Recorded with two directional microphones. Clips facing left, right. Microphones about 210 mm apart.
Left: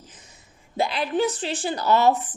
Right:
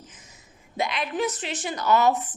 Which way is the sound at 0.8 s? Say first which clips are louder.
Left 4 dB; 30° left (ahead or behind).